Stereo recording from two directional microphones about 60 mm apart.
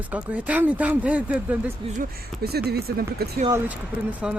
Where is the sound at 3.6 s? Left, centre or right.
Right.